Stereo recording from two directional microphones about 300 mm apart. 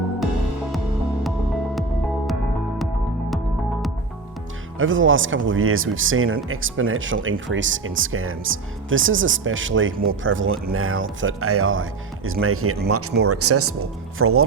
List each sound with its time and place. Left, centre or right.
3.2 s music: centre
4.8 s speech: right